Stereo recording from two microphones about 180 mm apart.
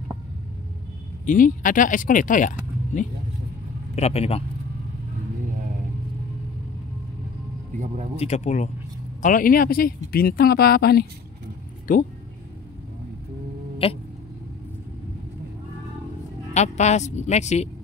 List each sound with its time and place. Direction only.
1.2 s speech: 45° left (ahead or behind)
7.8 s speech: 40° right (ahead or behind)
8.2 s speech: 40° left (ahead or behind)
9.2 s speech: 50° left (ahead or behind)
13.8 s speech: 35° left (ahead or behind)
16.5 s speech: 40° left (ahead or behind)